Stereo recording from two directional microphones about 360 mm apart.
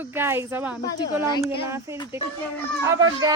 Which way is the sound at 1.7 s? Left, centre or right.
Centre.